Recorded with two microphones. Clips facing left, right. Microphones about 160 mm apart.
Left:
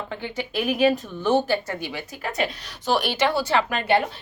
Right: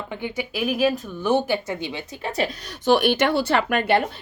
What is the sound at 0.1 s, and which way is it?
Speech, 15° right (ahead or behind).